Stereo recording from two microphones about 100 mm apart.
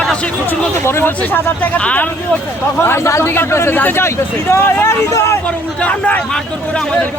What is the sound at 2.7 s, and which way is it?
Speech, 25° left (ahead or behind).